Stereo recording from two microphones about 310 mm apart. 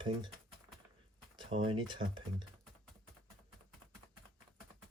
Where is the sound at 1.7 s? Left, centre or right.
Centre.